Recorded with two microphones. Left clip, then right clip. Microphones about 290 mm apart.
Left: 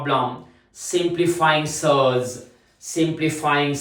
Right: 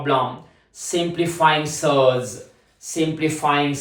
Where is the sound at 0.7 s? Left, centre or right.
Centre.